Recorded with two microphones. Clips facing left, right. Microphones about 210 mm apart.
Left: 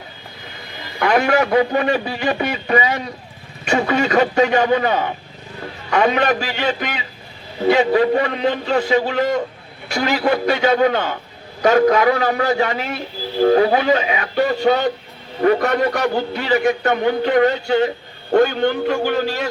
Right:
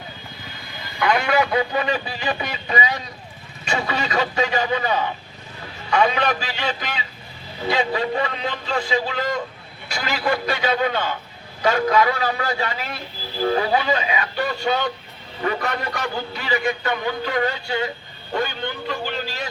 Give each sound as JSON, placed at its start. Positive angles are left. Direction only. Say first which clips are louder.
{"t": 0.9, "sound": "a man's voice", "louder": "left 4 dB", "side_deg": 50}